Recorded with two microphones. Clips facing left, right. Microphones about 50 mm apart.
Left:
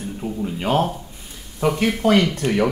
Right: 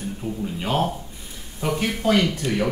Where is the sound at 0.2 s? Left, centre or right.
Centre.